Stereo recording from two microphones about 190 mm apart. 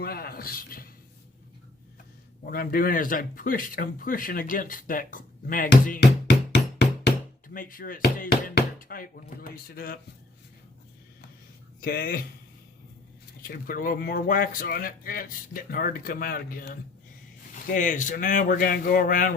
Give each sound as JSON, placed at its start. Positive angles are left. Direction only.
{"t": 0.0, "sound": "speech", "side_deg": 50}
{"t": 2.5, "sound": "speech", "side_deg": 50}
{"t": 11.8, "sound": "speech", "side_deg": 50}
{"t": 13.5, "sound": "speech", "side_deg": 50}